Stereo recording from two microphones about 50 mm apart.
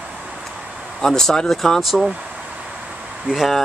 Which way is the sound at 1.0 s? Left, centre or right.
Centre.